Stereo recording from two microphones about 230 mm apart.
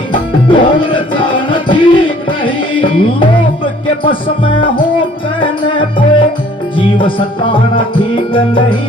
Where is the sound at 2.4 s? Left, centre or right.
Left.